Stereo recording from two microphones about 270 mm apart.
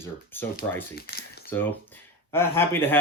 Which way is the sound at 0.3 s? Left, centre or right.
Centre.